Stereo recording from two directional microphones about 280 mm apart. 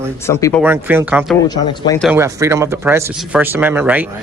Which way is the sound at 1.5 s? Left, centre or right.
Centre.